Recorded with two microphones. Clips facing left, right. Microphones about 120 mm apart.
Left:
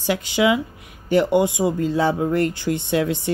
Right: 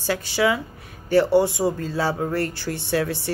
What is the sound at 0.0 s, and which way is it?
Speech, 20° left (ahead or behind).